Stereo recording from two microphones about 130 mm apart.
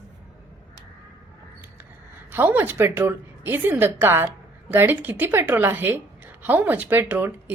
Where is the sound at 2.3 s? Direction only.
15° right (ahead or behind).